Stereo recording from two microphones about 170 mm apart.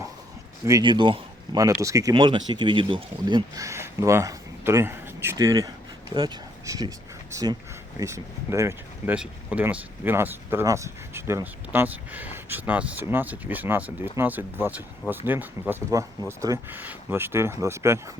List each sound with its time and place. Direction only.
0.6 s speech: 25° right (ahead or behind)